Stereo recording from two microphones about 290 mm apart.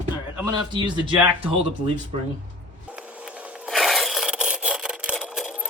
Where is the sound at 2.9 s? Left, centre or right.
Centre.